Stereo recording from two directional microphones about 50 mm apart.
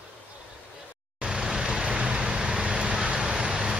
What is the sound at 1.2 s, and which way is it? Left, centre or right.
Vehicle, centre.